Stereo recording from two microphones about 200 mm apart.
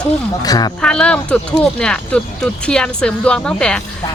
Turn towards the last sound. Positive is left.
turn(degrees=5)  # may be behind; listen again after turning